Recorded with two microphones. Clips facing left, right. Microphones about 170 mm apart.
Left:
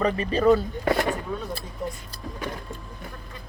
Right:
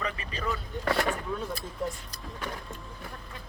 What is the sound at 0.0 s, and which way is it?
Speech, 35° left (ahead or behind).